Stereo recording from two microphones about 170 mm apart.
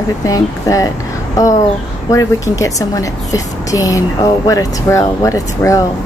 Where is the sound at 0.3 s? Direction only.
20° left (ahead or behind).